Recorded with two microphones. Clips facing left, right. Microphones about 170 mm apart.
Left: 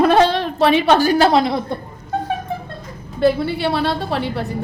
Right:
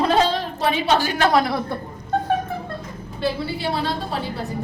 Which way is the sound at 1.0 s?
35° left (ahead or behind).